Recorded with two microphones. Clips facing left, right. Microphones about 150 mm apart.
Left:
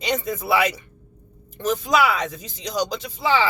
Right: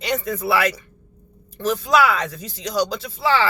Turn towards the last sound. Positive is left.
turn(degrees=15)  # may be behind; listen again after turning